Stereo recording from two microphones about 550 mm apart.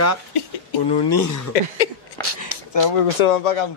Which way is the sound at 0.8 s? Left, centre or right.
Left.